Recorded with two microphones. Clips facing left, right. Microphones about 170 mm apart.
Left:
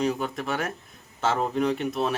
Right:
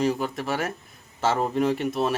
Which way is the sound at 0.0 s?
Centre (ahead or behind).